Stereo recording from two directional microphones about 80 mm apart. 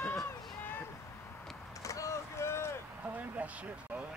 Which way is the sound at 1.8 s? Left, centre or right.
Left.